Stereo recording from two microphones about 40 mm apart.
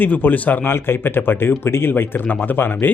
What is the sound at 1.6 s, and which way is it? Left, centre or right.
Speech, left.